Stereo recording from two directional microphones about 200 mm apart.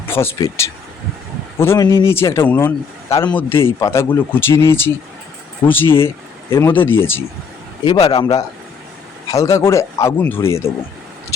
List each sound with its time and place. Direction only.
0.0 s a man's voice: 10° left (ahead or behind)
7.9 s speech: 30° left (ahead or behind)
8.1 s a man's voice: 20° left (ahead or behind)